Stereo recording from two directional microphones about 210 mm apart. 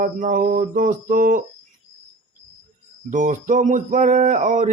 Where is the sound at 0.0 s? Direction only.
40° right (ahead or behind).